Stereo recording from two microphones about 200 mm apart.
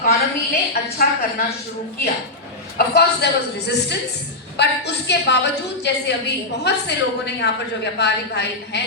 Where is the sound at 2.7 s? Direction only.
50° left (ahead or behind).